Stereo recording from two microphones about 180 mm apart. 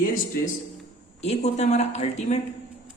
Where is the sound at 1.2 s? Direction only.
35° left (ahead or behind).